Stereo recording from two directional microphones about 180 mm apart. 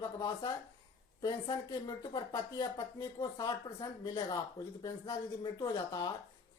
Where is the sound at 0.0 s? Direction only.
25° left (ahead or behind).